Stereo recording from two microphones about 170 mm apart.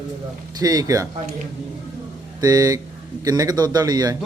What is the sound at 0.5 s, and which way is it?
Speech, 20° right (ahead or behind).